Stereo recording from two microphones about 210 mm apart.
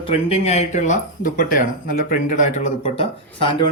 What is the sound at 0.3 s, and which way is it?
Speech, 30° left (ahead or behind).